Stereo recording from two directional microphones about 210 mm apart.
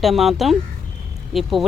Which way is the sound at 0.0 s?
Centre (ahead or behind).